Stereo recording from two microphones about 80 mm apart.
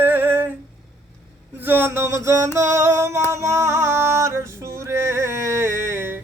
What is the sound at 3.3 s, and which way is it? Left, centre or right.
Music, right.